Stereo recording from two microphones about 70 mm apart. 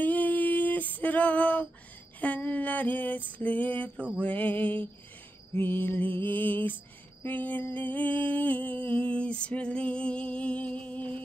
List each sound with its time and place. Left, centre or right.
0.0 s female singing: left
2.1 s music: left